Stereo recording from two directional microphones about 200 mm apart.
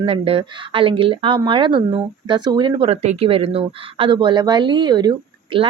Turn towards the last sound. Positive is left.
turn(degrees=-25)  # may be behind; listen again after turning